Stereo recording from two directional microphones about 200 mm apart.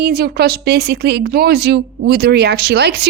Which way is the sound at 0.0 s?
50° right (ahead or behind).